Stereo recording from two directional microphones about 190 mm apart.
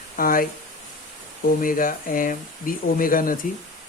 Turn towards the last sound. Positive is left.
turn(degrees=50)  # may be behind; listen again after turning